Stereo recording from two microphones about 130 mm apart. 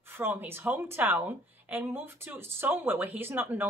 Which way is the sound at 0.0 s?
15° right (ahead or behind).